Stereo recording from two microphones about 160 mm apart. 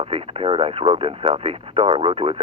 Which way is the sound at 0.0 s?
35° right (ahead or behind).